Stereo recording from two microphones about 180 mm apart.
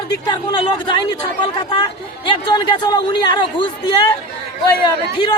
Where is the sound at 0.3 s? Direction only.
25° left (ahead or behind).